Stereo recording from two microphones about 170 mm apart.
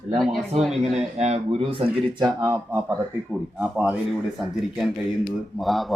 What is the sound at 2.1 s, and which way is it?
Speech, 25° right (ahead or behind).